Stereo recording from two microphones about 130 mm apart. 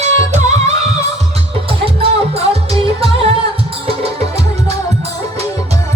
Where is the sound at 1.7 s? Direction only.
45° right (ahead or behind).